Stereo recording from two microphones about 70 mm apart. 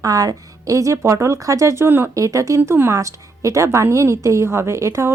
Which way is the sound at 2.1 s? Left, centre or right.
Right.